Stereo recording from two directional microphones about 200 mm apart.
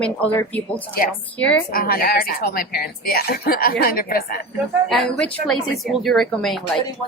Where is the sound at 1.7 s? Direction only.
45° left (ahead or behind).